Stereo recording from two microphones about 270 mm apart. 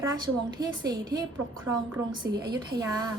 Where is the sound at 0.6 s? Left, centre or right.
Centre.